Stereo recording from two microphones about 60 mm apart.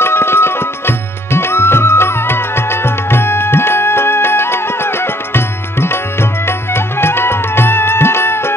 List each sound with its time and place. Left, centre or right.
0.0 s music: left